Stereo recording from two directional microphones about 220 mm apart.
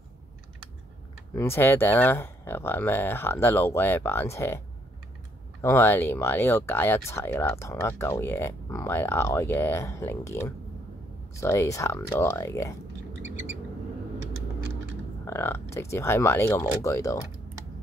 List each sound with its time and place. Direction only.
1.3 s speech: 10° left (ahead or behind)
15.2 s speech: 10° left (ahead or behind)